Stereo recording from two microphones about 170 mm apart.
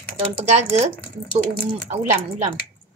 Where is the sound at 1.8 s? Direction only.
40° right (ahead or behind).